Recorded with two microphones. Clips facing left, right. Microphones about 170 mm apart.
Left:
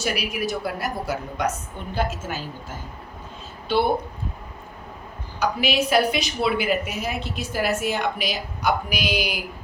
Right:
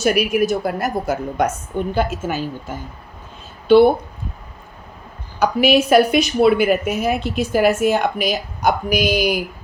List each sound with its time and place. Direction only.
0.0 s a woman's voice: 50° right (ahead or behind)
2.0 s a woman's voice: 60° right (ahead or behind)
5.4 s a woman's voice: 50° right (ahead or behind)